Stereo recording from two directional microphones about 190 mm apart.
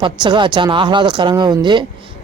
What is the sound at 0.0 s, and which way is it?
Speech, 25° right (ahead or behind).